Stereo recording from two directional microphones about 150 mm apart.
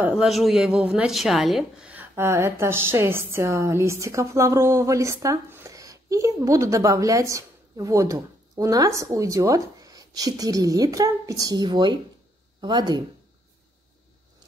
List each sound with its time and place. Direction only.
0.0 s a woman's voice: 5° right (ahead or behind); by 13.0 s 30° right (ahead or behind)